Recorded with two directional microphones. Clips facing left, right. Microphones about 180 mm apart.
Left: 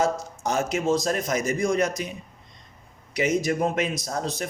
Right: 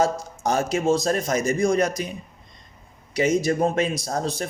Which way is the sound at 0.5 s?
30° right (ahead or behind).